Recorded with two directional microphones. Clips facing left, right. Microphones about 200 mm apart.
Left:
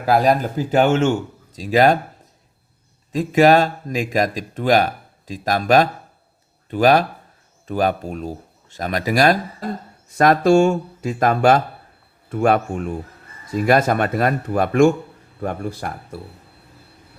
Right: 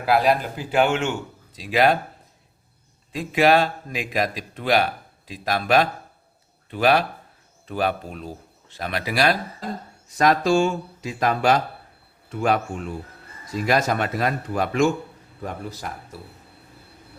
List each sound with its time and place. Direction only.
0.0 s speech: 45° left (ahead or behind)
3.1 s speech: 45° left (ahead or behind)